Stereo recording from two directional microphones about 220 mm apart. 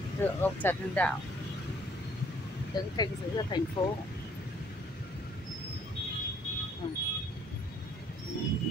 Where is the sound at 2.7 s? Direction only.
20° left (ahead or behind).